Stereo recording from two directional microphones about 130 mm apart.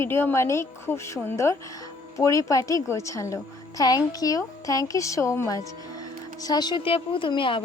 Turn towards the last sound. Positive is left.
turn(degrees=40)  # may be behind; listen again after turning